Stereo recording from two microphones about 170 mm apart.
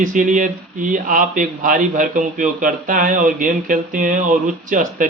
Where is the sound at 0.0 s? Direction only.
50° right (ahead or behind).